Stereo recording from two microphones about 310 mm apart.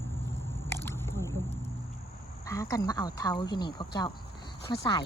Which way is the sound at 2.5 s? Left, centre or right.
Centre.